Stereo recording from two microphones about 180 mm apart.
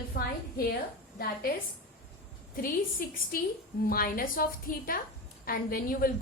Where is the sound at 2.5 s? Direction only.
50° left (ahead or behind).